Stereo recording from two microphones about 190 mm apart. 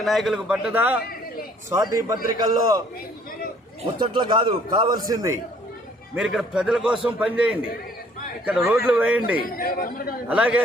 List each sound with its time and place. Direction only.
0.0 s a man's voice: centre (ahead or behind); by 2.8 s 20° right (ahead or behind)
3.9 s a man's voice: 25° right (ahead or behind)
6.1 s a man's voice: 5° right (ahead or behind)
9.6 s speech: 50° left (ahead or behind)
10.2 s a man's voice: 5° right (ahead or behind)